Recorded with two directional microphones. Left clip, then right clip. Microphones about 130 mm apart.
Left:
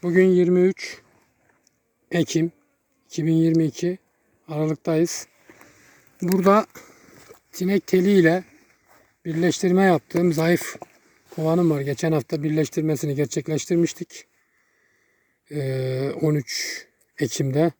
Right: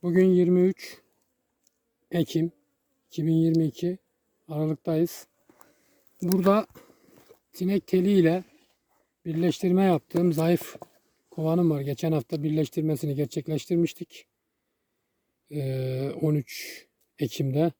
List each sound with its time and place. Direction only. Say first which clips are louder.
0.0 s speech: left 4 dB; 20° right (ahead or behind)
2.0 s speech: left 5 dB; 10° right (ahead or behind)
6.2 s a sound: left 5 dB; 5° right (ahead or behind)
7.5 s speech: left 5 dB; 5° right (ahead or behind)
15.4 s speech: left 5 dB; 5° right (ahead or behind)